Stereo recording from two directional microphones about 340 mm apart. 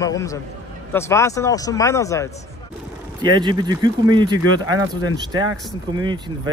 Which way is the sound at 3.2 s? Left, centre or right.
Centre.